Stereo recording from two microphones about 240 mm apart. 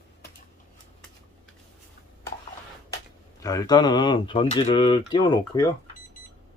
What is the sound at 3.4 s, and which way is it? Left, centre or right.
Speech, centre.